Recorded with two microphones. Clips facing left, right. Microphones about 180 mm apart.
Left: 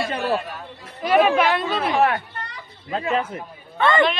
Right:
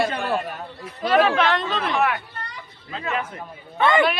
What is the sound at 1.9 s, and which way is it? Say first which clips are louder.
A man's voice: left 4 dB; 35° left (ahead or behind).